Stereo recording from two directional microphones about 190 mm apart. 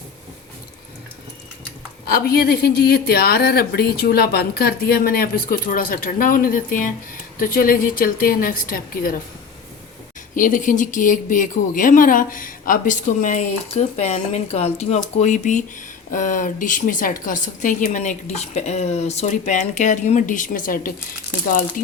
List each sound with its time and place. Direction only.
2.0 s speech: 50° left (ahead or behind)
10.3 s speech: 45° left (ahead or behind)